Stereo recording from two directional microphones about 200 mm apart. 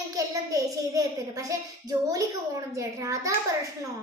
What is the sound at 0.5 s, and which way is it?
A child's voice, 15° right (ahead or behind).